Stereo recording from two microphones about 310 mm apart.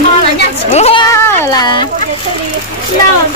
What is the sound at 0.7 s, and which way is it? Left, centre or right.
Speech, centre.